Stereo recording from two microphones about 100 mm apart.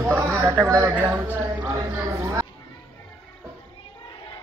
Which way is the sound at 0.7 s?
30° right (ahead or behind).